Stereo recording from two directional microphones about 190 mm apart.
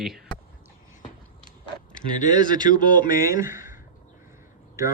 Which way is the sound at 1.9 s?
40° left (ahead or behind).